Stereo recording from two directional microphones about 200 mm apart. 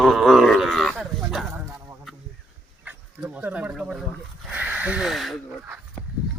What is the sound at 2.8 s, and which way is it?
Dog, 10° right (ahead or behind).